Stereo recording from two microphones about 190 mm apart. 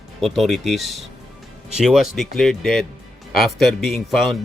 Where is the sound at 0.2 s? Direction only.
Centre (ahead or behind).